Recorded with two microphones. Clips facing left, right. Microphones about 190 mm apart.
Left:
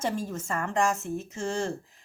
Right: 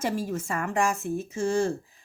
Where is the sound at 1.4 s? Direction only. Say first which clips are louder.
Right 6 dB; 15° right (ahead or behind).